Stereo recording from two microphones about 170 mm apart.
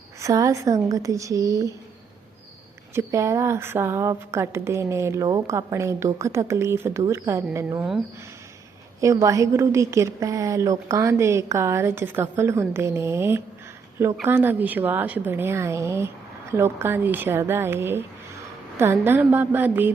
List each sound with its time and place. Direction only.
0.2 s a woman's voice: 20° right (ahead or behind)
2.9 s a woman's voice: 15° right (ahead or behind)
9.0 s a woman's voice: 20° right (ahead or behind)